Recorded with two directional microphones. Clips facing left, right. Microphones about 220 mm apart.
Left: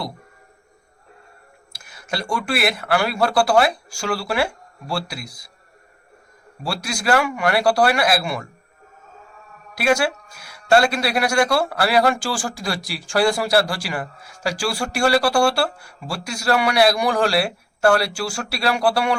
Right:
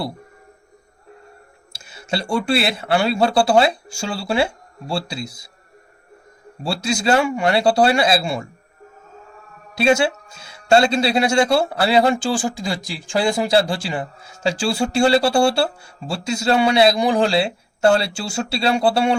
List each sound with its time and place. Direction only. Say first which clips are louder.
1.7 s speech: right 3 dB; 25° right (ahead or behind)
6.6 s speech: right 5 dB; 25° right (ahead or behind)
9.7 s speech: right 3 dB; 25° right (ahead or behind)